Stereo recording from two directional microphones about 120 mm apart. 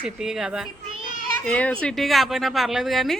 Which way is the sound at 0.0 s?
5° right (ahead or behind).